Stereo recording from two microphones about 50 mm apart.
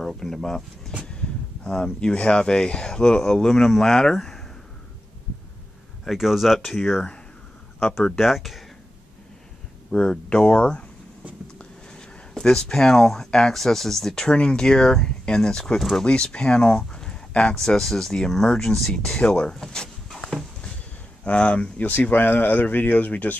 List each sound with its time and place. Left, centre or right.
0.0 s speech: centre
1.0 s speech: centre
6.0 s speech: centre
6.8 s speech: centre
8.2 s speech: centre
9.8 s speech: centre
17.6 s speech: centre
20.1 s a sound: centre
21.2 s speech: left